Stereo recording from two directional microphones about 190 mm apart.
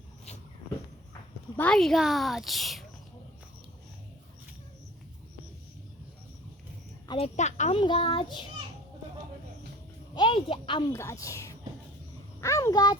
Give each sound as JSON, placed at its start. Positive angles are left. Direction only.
{"t": 1.5, "sound": "a woman's voice", "side_deg": 5}
{"t": 7.1, "sound": "a woman's voice", "side_deg": 35}
{"t": 7.8, "sound": "child singing", "side_deg": 25}
{"t": 10.2, "sound": "speech", "side_deg": 25}
{"t": 10.9, "sound": "a woman's voice", "side_deg": 15}
{"t": 12.4, "sound": "a sound", "side_deg": 15}